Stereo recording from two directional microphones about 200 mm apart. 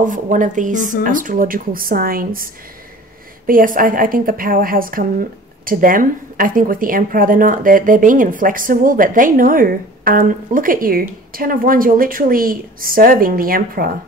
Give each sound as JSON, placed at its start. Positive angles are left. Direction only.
{"t": 0.0, "sound": "a woman's voice", "side_deg": -40}